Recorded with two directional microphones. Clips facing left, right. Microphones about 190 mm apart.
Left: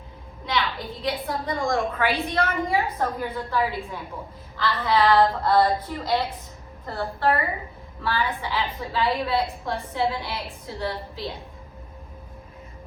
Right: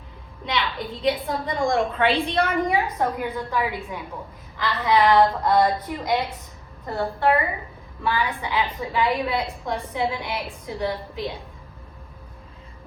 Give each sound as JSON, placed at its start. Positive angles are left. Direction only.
{"t": 0.4, "sound": "a woman's voice", "side_deg": -20}